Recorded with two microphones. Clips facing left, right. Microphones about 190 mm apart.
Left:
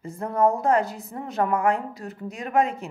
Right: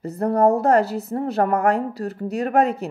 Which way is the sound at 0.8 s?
65° right (ahead or behind).